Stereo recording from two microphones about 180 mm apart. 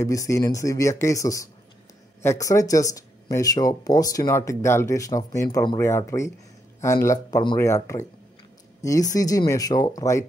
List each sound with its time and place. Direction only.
0.0 s speech: 15° left (ahead or behind)